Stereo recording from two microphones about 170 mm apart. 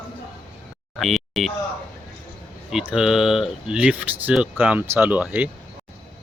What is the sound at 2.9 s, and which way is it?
Speech, 5° right (ahead or behind).